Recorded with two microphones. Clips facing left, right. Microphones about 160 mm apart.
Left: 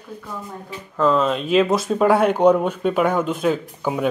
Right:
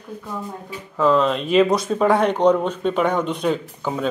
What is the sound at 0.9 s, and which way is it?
Speech, centre (ahead or behind).